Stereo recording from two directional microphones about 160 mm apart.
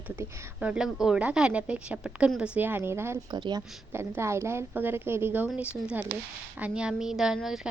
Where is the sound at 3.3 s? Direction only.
25° right (ahead or behind).